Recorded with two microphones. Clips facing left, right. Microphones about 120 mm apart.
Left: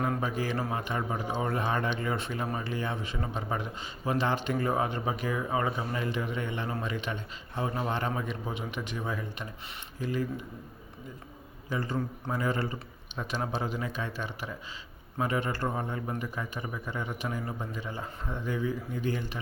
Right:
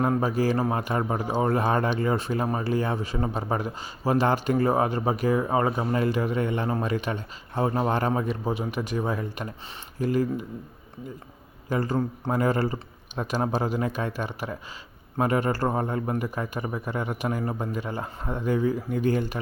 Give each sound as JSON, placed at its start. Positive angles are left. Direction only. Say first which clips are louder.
{"t": 0.1, "sound": "a man's voice", "louder": "right 7 dB", "side_deg": -35}
{"t": 11.7, "sound": "a man's voice", "louder": "right 6 dB", "side_deg": -40}